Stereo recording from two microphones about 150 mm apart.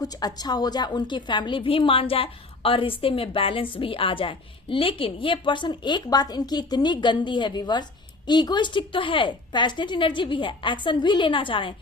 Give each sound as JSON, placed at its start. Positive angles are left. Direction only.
{"t": 0.0, "sound": "a woman's voice", "side_deg": 25}